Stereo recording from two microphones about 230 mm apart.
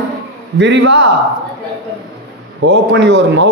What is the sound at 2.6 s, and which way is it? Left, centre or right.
Speech, right.